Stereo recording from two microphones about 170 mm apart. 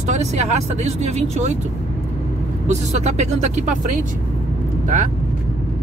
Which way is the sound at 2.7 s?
40° right (ahead or behind).